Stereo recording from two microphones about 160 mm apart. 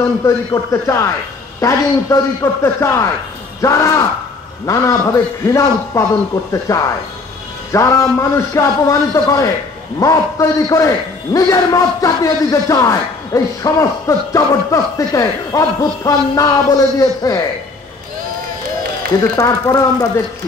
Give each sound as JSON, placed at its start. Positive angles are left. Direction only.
{"t": 0.2, "sound": "a man's voice", "side_deg": 20}
{"t": 19.3, "sound": "a man's voice", "side_deg": 20}